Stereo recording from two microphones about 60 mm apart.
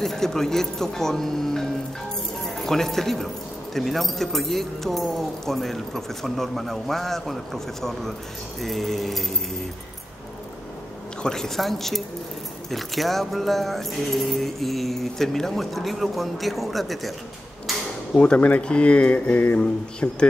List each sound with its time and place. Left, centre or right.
0.0 s speech: centre
11.2 s speech: centre
18.1 s speech: centre